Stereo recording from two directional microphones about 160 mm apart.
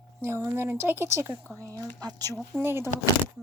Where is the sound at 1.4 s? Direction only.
10° left (ahead or behind).